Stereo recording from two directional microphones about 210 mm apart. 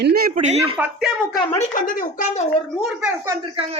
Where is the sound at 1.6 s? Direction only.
40° left (ahead or behind).